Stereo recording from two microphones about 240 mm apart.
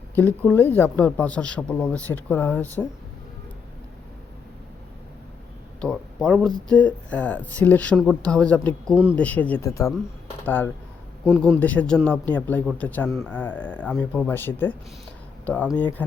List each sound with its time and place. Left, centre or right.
0.2 s speech: centre
5.8 s speech: centre